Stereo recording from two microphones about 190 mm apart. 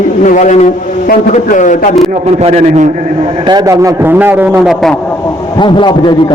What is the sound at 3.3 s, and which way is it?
A man's voice, 25° right (ahead or behind).